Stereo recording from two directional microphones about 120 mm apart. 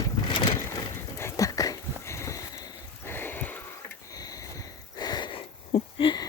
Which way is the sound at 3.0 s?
20° left (ahead or behind).